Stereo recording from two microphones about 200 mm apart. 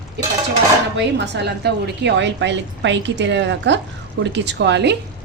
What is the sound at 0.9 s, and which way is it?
A woman's voice, 60° right (ahead or behind).